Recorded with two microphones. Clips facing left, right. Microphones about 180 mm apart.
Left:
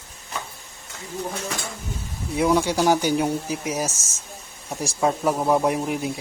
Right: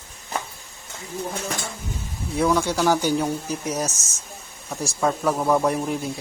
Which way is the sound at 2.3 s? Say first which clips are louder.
Left 1 dB; 15° left (ahead or behind).